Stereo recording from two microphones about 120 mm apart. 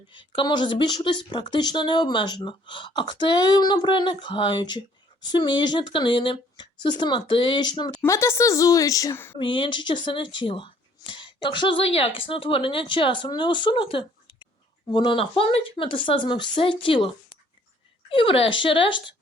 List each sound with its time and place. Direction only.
0.1 s speech: 40° left (ahead or behind)
8.0 s a woman's voice: 25° left (ahead or behind)
9.4 s speech: 45° left (ahead or behind)